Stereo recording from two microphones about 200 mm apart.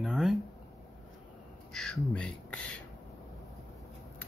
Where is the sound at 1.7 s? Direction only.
5° left (ahead or behind).